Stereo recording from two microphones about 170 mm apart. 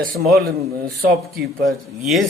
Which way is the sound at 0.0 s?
60° right (ahead or behind).